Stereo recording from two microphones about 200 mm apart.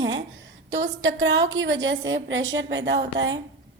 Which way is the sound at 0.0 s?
70° right (ahead or behind).